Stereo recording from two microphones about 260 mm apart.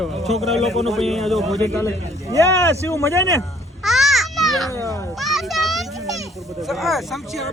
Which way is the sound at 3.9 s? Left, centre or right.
Centre.